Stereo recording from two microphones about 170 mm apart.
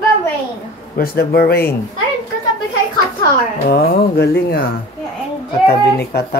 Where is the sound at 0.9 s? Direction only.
60° left (ahead or behind).